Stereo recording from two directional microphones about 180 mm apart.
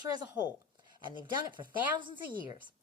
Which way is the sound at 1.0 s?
25° right (ahead or behind).